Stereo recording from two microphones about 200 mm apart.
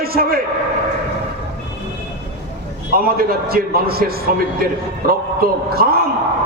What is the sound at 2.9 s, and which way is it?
A man's voice, 50° right (ahead or behind).